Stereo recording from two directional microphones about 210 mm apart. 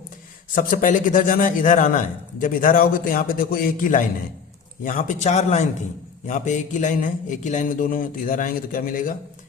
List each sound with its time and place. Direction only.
0.5 s a man's voice: 40° left (ahead or behind)